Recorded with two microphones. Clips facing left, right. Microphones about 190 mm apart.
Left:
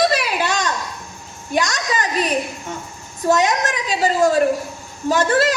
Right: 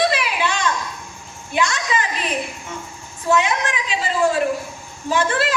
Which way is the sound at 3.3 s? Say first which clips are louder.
Left 2 dB; 40° left (ahead or behind).